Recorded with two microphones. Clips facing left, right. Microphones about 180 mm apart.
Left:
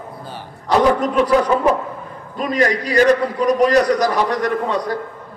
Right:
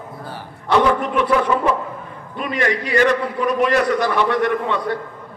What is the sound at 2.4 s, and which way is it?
A man's voice, 40° left (ahead or behind).